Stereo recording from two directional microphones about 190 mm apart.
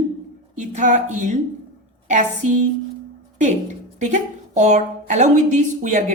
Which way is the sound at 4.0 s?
40° right (ahead or behind).